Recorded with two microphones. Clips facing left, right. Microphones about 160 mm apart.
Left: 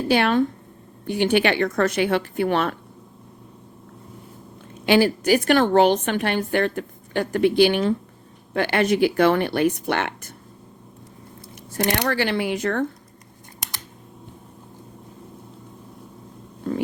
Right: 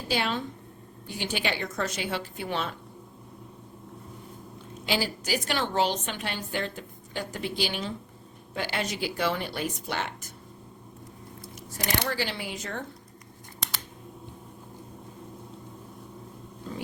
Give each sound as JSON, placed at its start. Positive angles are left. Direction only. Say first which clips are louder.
{"t": 0.1, "sound": "a woman's voice", "louder": "left 10 dB", "side_deg": 60}
{"t": 4.9, "sound": "a woman's voice", "louder": "left 12 dB", "side_deg": 60}
{"t": 11.9, "sound": "a woman's voice", "louder": "left 7 dB", "side_deg": 65}